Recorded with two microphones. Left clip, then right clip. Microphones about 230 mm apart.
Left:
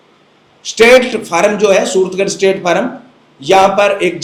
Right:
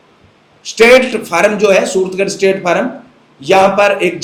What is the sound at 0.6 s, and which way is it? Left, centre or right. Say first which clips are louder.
A man's voice: even; left.